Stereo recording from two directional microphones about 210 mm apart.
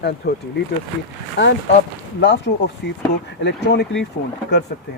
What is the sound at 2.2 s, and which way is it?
Speech, 55° left (ahead or behind).